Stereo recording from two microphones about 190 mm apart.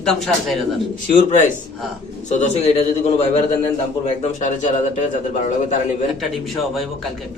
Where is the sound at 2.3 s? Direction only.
35° left (ahead or behind).